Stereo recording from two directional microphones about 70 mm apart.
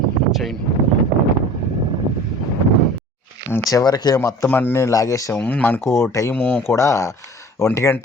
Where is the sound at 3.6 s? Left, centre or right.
Left.